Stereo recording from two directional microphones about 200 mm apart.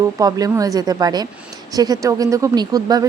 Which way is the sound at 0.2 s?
20° right (ahead or behind).